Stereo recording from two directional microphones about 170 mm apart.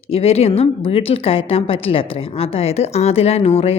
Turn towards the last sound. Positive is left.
turn(degrees=40)  # may be behind; listen again after turning